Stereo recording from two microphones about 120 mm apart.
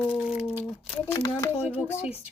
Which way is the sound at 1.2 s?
45° left (ahead or behind).